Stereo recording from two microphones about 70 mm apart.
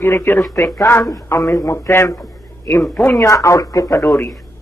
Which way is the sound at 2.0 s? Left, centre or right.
Left.